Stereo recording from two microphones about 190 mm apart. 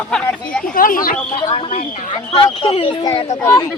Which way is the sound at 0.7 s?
45° left (ahead or behind).